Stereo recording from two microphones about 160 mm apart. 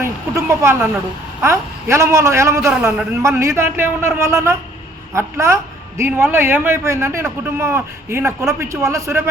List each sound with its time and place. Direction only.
0.0 s a man's voice: 15° right (ahead or behind)